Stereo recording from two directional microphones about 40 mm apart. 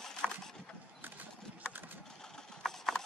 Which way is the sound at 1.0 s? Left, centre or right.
Right.